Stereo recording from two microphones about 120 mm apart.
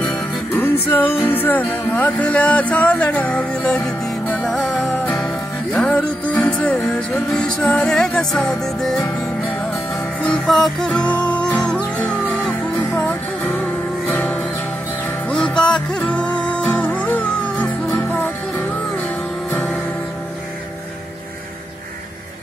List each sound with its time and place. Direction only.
0.0 s music: 15° left (ahead or behind)
10.2 s music: 5° left (ahead or behind)